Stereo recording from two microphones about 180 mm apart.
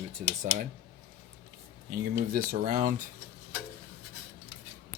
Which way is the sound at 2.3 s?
55° right (ahead or behind).